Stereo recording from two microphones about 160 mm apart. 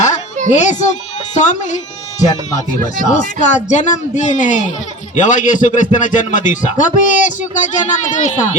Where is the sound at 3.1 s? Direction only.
50° left (ahead or behind).